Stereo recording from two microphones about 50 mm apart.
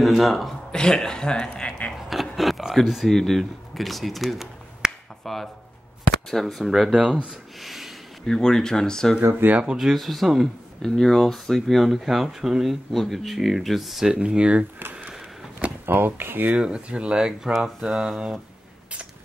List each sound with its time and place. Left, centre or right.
0.0 s speech: centre
0.7 s speech: centre
2.0 s a sound: centre
5.2 s speech: centre
7.6 s a sound: centre
8.3 s speech: centre
9.4 s speech: right
9.8 s speech: centre
14.1 s speech: centre
14.8 s a sound: right
15.8 s speech: right
16.5 s speech: centre
17.3 s speech: centre